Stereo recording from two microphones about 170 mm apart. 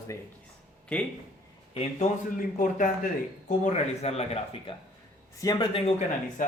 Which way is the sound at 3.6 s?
40° left (ahead or behind).